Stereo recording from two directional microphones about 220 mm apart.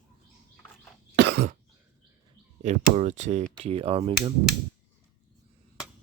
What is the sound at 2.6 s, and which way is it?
Speech, 35° right (ahead or behind).